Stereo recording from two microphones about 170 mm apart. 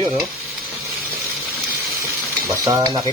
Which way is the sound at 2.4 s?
20° right (ahead or behind).